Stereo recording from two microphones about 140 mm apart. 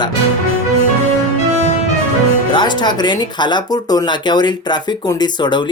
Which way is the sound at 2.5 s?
30° left (ahead or behind).